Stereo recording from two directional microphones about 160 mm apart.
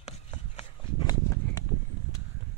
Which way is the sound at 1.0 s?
25° left (ahead or behind).